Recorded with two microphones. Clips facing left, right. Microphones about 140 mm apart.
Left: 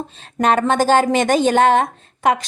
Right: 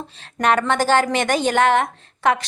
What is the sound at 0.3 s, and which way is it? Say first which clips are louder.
A woman's voice: left 3 dB; 25° left (ahead or behind).